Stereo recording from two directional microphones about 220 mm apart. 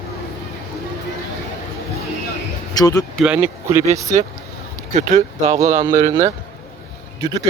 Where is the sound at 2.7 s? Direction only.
15° left (ahead or behind).